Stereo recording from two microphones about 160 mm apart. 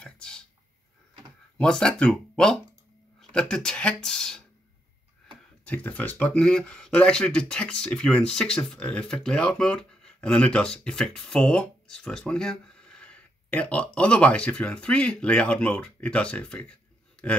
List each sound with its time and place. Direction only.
0.0 s a sound: 5° left (ahead or behind)
1.6 s speech: 5° left (ahead or behind)
5.7 s speech: 10° left (ahead or behind)